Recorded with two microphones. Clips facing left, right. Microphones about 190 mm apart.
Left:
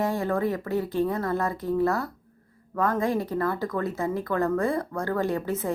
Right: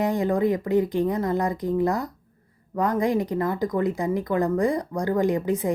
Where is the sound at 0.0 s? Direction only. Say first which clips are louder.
Right 3 dB; 15° right (ahead or behind).